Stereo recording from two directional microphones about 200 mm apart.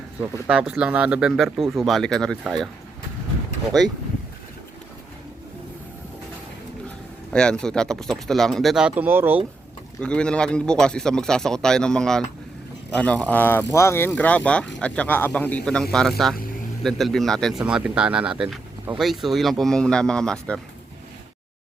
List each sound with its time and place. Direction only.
0.2 s speech: 5° right (ahead or behind)
7.3 s speech: 5° left (ahead or behind)
10.0 s speech: 5° left (ahead or behind)